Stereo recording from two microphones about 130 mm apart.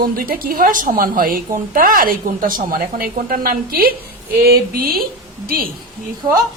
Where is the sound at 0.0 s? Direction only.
90° right.